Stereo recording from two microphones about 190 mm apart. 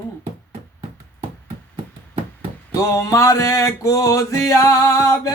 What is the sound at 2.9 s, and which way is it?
Music, 15° left (ahead or behind).